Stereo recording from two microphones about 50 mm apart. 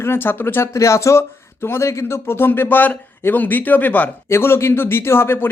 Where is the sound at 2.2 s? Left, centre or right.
Left.